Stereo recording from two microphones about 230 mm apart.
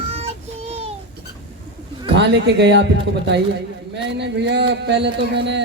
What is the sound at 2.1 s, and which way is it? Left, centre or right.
Speech, right.